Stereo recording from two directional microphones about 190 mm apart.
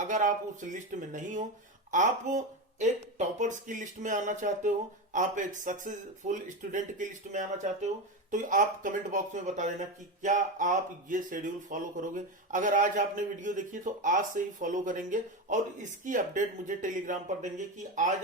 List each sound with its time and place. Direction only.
0.0 s speech: 40° right (ahead or behind)